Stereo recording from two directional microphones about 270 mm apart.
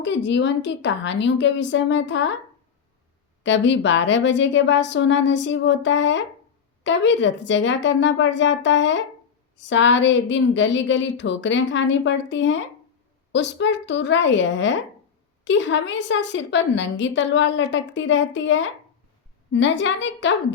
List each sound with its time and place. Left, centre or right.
0.0 s a woman's voice: left
3.4 s a woman's voice: left